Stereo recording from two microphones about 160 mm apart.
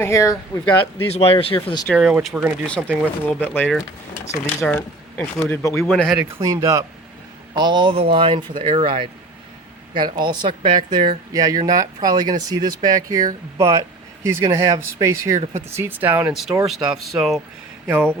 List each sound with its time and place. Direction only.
0.0 s speech: 20° left (ahead or behind)
1.0 s speech: 40° left (ahead or behind)
1.9 s speech: centre (ahead or behind)
2.6 s speech: 5° left (ahead or behind)
4.1 s speech: 10° left (ahead or behind)
5.7 s speech: centre (ahead or behind)
6.4 s speech: 20° right (ahead or behind); by 17.4 s centre (ahead or behind)
17.8 s speech: 15° right (ahead or behind)